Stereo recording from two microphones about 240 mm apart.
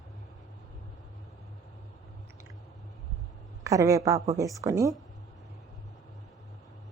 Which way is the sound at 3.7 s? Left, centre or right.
Centre.